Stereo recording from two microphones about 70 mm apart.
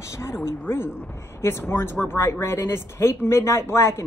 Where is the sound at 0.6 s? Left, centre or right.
Left.